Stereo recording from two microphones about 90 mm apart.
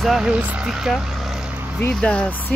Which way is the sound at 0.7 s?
5° right (ahead or behind).